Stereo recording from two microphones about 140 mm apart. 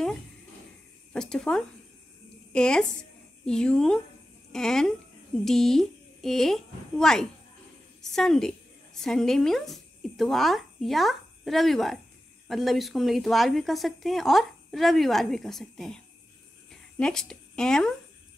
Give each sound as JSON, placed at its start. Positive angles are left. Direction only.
{"t": 1.1, "sound": "a woman's voice", "side_deg": 5}
{"t": 2.2, "sound": "a sound", "side_deg": 5}
{"t": 3.4, "sound": "a woman's voice", "side_deg": 5}
{"t": 17.0, "sound": "a woman's voice", "side_deg": 5}